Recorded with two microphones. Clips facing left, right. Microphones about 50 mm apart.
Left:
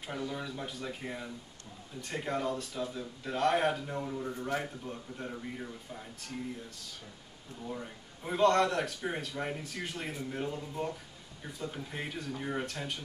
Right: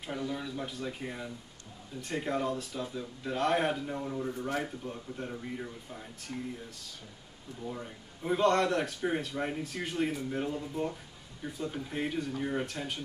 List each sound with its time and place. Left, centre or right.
0.0 s speech: centre
7.6 s speech: centre